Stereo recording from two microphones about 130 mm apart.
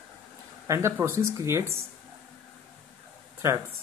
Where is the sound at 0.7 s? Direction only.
20° right (ahead or behind).